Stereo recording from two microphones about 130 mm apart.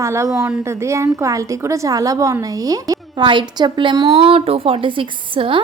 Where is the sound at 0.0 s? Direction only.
20° right (ahead or behind).